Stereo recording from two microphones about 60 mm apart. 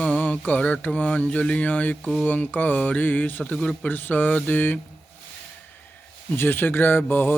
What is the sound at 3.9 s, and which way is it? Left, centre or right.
Speech, left.